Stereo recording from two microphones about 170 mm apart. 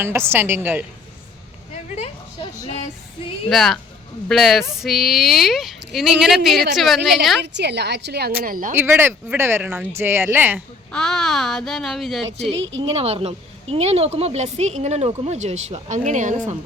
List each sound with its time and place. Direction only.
0.0 s speech: 15° right (ahead or behind)
3.5 s speech: centre (ahead or behind)
7.4 s a woman's voice: 90° right
8.4 s speech: 55° right (ahead or behind)
8.7 s speech: 10° right (ahead or behind)
10.9 s speech: 5° left (ahead or behind)
12.5 s a woman's voice: 90° right
12.8 s a woman's voice: 35° right (ahead or behind)